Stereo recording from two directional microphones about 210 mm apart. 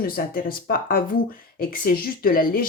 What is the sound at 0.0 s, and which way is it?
Speech, 45° left (ahead or behind).